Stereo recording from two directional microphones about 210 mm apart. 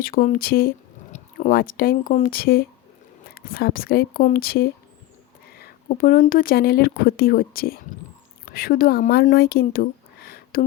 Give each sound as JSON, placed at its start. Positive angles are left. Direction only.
{"t": 0.0, "sound": "speech", "side_deg": 40}